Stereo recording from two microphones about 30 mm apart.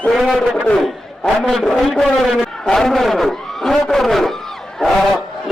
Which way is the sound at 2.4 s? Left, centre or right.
Centre.